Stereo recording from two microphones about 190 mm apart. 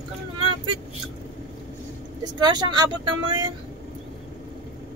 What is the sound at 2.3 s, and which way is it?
Speech, 20° right (ahead or behind).